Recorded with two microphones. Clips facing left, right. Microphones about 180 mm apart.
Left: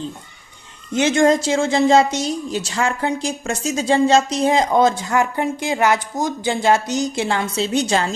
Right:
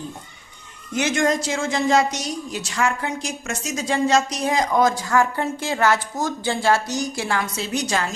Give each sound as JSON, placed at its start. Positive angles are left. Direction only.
{"t": 0.9, "sound": "a woman's voice", "side_deg": 30}